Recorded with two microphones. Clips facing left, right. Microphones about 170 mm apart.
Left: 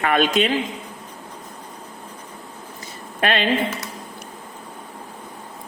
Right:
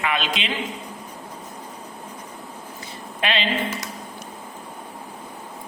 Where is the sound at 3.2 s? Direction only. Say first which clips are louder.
Left 4 dB; 50° left (ahead or behind).